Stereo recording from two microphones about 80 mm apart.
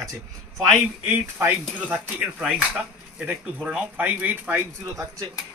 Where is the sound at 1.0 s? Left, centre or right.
Right.